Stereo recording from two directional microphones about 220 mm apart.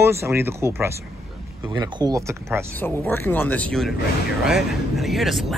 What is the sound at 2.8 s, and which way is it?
Speech, 10° left (ahead or behind).